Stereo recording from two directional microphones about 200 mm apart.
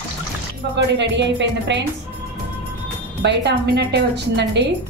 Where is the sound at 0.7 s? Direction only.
60° right (ahead or behind).